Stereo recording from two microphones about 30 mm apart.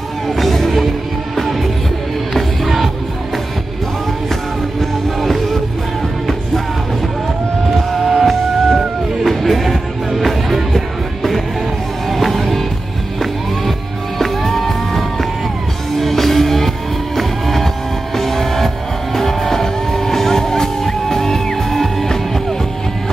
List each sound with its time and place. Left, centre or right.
0.4 s music: centre
5.2 s music: centre
7.7 s music: centre
12.1 s music: centre